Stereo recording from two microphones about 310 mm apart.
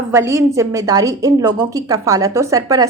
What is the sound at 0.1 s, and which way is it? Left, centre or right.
A woman's voice, centre.